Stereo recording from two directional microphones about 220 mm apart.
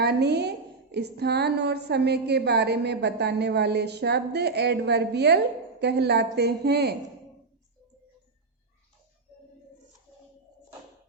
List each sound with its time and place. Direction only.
0.0 s a woman's voice: 50° right (ahead or behind)